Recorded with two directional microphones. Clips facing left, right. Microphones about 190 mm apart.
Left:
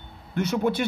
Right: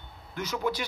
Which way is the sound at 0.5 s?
55° left (ahead or behind).